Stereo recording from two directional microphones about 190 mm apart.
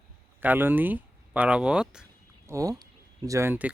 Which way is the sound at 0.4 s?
10° right (ahead or behind).